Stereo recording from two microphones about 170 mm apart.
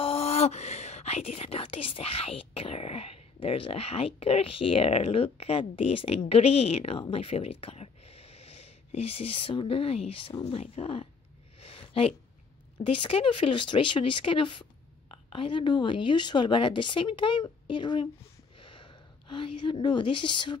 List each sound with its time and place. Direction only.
0.0 s speech: 35° left (ahead or behind)
11.6 s a sound: 35° left (ahead or behind)
12.8 s a woman's voice: 30° left (ahead or behind)